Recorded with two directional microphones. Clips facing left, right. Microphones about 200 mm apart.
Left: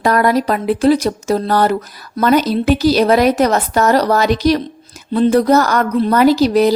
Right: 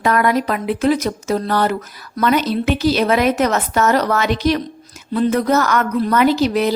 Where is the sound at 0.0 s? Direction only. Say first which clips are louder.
Left 3 dB; 35° left (ahead or behind).